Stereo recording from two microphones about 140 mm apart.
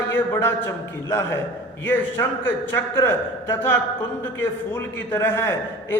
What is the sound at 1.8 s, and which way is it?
A man's voice, 15° left (ahead or behind).